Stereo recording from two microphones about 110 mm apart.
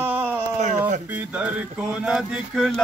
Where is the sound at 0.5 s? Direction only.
90° right.